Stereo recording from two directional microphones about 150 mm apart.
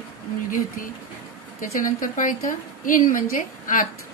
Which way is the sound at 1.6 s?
65° left (ahead or behind).